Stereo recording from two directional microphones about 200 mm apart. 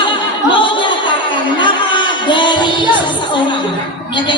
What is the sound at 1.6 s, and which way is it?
Music, 25° left (ahead or behind).